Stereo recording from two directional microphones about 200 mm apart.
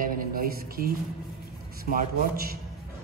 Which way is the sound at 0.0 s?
45° right (ahead or behind).